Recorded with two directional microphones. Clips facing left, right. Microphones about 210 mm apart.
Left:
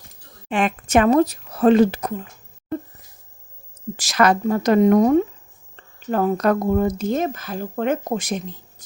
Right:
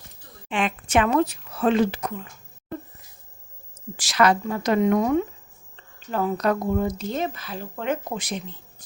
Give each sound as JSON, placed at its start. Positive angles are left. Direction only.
{"t": 0.4, "sound": "speech", "side_deg": 40}
{"t": 3.9, "sound": "speech", "side_deg": 45}